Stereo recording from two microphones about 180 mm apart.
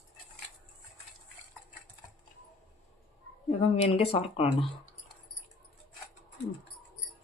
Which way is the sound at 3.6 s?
35° left (ahead or behind).